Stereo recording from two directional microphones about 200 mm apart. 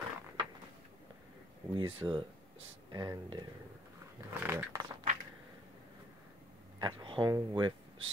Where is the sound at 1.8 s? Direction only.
25° right (ahead or behind).